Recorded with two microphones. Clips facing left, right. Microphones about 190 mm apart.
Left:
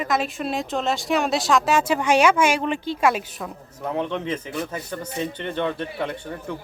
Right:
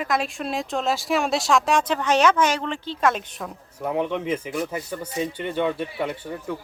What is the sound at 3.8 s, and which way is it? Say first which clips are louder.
Speech: right 1 dB; 10° right (ahead or behind).